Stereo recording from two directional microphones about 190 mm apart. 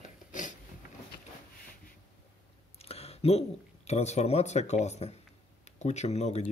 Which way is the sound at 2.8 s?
30° left (ahead or behind).